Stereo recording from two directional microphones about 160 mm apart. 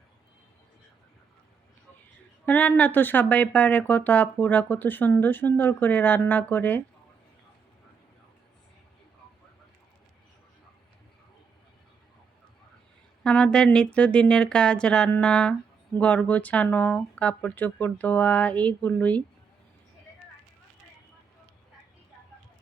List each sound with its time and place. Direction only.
2.5 s speech: 10° left (ahead or behind)
13.2 s speech: 5° left (ahead or behind)